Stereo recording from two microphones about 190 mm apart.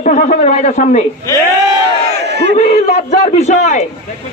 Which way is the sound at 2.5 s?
35° left (ahead or behind).